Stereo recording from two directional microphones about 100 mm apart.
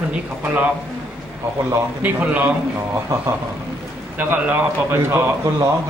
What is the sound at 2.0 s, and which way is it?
Speech, 15° right (ahead or behind).